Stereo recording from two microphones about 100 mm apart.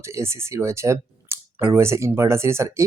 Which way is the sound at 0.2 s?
25° right (ahead or behind).